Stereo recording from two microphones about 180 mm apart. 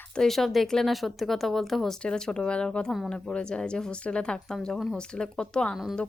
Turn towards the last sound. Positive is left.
turn(degrees=0)  # may be behind; listen again after turning